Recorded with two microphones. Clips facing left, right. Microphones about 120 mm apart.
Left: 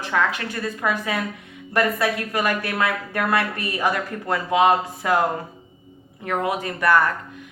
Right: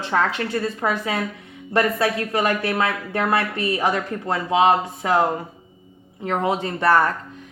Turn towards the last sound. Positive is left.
turn(degrees=-30)  # may be behind; listen again after turning